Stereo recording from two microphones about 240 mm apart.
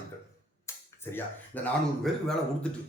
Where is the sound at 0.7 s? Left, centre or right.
Centre.